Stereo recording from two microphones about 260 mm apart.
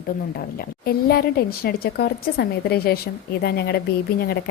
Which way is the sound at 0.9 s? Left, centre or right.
Left.